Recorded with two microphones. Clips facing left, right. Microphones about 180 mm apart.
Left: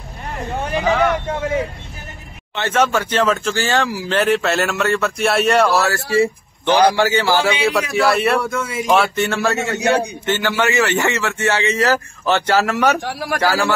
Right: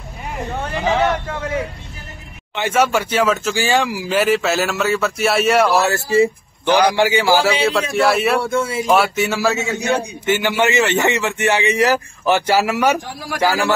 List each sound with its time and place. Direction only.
0.5 s speech: 15° left (ahead or behind)
1.2 s a man's voice: 25° left (ahead or behind)
2.5 s speech: 10° right (ahead or behind)
5.7 s speech: 20° right (ahead or behind)
7.9 s speech: centre (ahead or behind)
8.4 s speech: 30° right (ahead or behind)
8.8 s speech: 5° right (ahead or behind)
9.6 s a man's voice: 65° left (ahead or behind)
10.2 s speech: 15° right (ahead or behind)
13.0 s a man's voice: 65° left (ahead or behind)